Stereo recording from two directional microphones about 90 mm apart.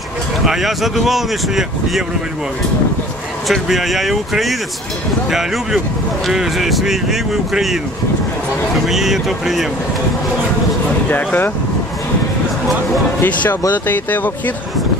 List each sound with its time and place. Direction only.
0.5 s speech: 5° right (ahead or behind)
3.4 s speech: centre (ahead or behind)
8.8 s speech: 5° right (ahead or behind)
11.1 s speech: 20° left (ahead or behind)
13.2 s speech: 20° left (ahead or behind)